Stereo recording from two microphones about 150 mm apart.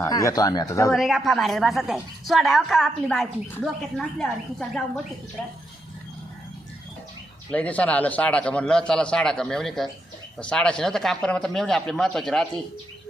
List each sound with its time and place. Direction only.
0.0 s speech: 20° left (ahead or behind)
0.9 s a woman's voice: centre (ahead or behind)
7.5 s a man's voice: 10° left (ahead or behind)